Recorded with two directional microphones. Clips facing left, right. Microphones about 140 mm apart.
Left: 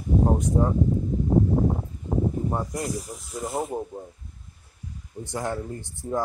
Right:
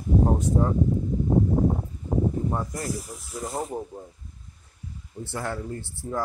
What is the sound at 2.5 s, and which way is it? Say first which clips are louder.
Speech: left 1 dB; 20° left (ahead or behind).